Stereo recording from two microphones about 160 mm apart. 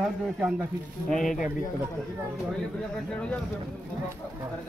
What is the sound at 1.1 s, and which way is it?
Speech, centre (ahead or behind).